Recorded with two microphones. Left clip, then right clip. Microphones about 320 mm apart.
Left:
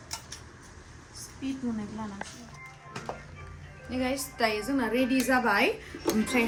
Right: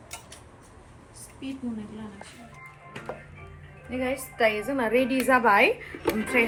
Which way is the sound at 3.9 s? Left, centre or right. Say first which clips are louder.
Right 2 dB; centre.